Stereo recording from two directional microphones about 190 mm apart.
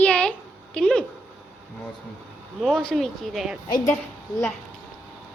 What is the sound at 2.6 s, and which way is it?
Speech, centre (ahead or behind).